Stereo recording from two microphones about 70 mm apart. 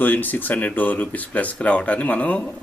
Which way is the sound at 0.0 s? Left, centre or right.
Left.